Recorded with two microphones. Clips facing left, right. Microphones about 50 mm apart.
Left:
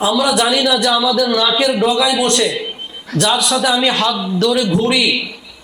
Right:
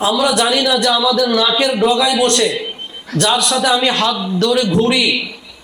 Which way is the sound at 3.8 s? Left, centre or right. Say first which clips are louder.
Even; centre.